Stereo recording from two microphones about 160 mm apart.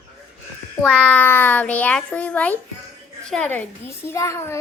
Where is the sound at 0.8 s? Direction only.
10° left (ahead or behind).